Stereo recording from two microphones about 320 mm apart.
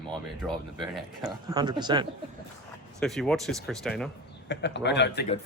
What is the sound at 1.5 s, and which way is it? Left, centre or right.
Speech, centre.